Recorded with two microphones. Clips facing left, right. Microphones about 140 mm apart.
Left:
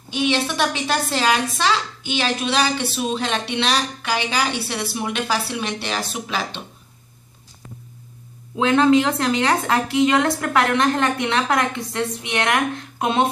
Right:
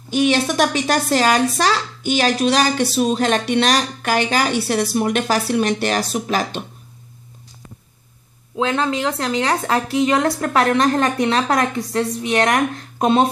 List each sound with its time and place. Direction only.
0.1 s a woman's voice: 45° right (ahead or behind)
8.5 s a woman's voice: 40° right (ahead or behind)